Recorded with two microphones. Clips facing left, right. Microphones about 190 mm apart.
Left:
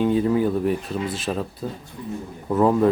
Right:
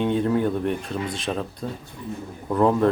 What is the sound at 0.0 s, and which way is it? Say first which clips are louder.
Speech: left 2 dB; 5° left (ahead or behind).